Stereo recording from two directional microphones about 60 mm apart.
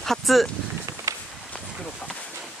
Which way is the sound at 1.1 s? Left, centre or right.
Right.